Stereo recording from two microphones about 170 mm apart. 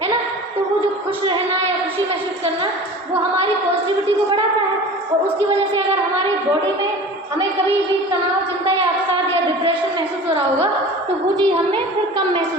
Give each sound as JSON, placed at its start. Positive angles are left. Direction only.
{"t": 11.3, "sound": "a woman's voice", "side_deg": -25}